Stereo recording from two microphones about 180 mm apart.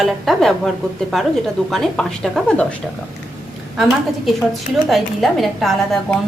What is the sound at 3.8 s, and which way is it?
A woman's voice, centre (ahead or behind).